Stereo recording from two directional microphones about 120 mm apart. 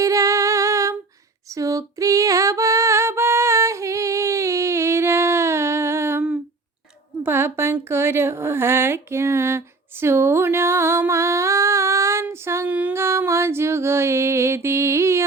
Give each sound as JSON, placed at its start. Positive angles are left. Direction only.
{"t": 0.0, "sound": "female singing", "side_deg": -25}
{"t": 7.3, "sound": "speech", "side_deg": -20}
{"t": 12.7, "sound": "a sound", "side_deg": -15}